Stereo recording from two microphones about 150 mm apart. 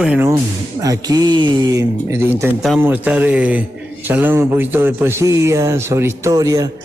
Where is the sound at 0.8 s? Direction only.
25° right (ahead or behind).